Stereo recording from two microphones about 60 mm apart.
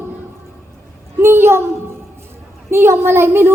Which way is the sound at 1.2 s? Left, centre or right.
Right.